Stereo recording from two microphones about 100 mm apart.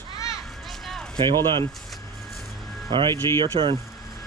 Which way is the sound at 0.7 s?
Centre (ahead or behind).